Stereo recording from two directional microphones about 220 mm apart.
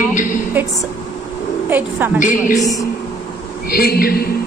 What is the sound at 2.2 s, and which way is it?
Speech, 35° left (ahead or behind).